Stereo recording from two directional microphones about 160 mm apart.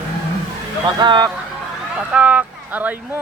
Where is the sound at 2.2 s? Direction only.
10° right (ahead or behind).